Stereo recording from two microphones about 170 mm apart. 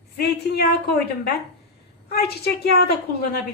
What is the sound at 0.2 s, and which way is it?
A woman's voice, 70° left (ahead or behind).